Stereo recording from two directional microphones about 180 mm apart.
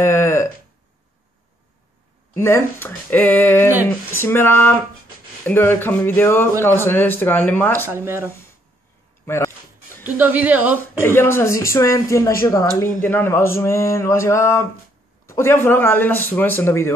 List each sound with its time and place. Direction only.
0.0 s a sound: 15° left (ahead or behind)
2.3 s speech: 15° left (ahead or behind)
7.9 s a woman's voice: 15° right (ahead or behind)
9.2 s a sound: 15° left (ahead or behind)
10.0 s a woman's voice: 10° right (ahead or behind)
11.0 s speech: 15° left (ahead or behind)